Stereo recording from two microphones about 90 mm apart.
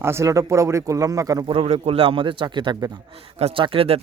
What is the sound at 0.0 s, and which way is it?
Speech, 30° right (ahead or behind).